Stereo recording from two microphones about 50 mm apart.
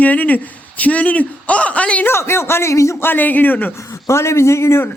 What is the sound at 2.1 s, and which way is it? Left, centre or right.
Speech, left.